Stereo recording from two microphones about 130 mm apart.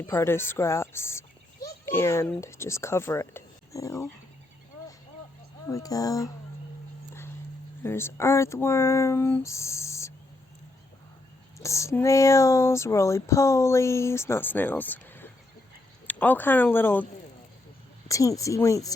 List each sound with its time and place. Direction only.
0.1 s a child's voice: 20° left (ahead or behind)
5.6 s speech: 25° left (ahead or behind)
7.9 s speech: 20° left (ahead or behind)
11.6 s speech: 25° left (ahead or behind)
18.1 s speech: 25° left (ahead or behind)